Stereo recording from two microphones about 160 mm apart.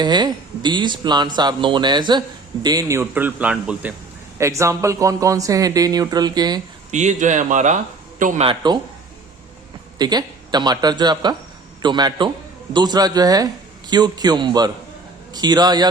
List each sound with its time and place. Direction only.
0.0 s speech: 25° right (ahead or behind); by 3.9 s 10° right (ahead or behind)
4.4 s speech: 20° right (ahead or behind)
6.9 s speech: 45° right (ahead or behind)
8.4 s speech: 25° right (ahead or behind)
10.0 s speech: 25° right (ahead or behind)